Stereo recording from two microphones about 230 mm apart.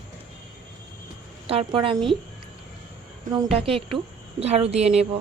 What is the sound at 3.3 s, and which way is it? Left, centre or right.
Speech, right.